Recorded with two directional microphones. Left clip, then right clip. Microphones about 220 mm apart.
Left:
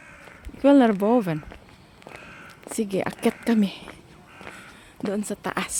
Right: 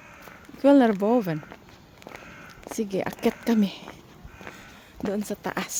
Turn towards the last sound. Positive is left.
turn(degrees=10)  # may be behind; listen again after turning